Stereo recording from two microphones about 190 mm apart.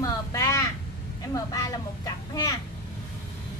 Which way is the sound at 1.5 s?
20° left (ahead or behind).